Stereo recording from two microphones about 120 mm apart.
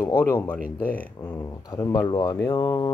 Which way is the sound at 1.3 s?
30° left (ahead or behind).